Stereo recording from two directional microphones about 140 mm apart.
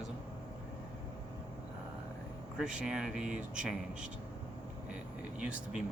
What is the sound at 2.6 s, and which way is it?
Speech, 5° right (ahead or behind).